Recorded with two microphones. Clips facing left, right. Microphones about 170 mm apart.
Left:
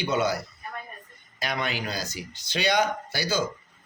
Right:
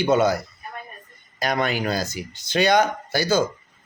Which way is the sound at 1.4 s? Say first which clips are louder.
Right 7 dB; 45° right (ahead or behind).